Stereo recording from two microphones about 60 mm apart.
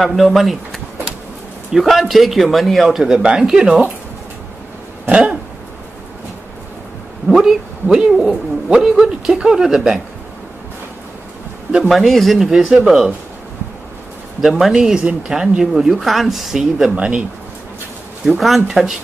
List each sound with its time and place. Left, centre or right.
0.0 s speech: centre
5.1 s a man's voice: centre
7.2 s a man's voice: centre
11.9 s speech: centre
14.4 s a man's voice: centre
16.9 s a man's voice: centre
18.4 s speech: centre